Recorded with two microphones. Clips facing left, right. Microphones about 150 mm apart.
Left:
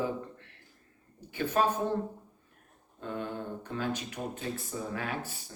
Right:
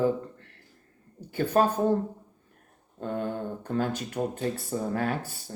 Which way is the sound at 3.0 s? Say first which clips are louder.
Right 5 dB; 45° right (ahead or behind).